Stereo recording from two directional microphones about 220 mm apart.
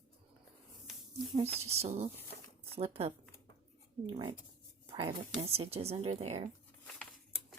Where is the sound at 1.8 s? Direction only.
30° right (ahead or behind).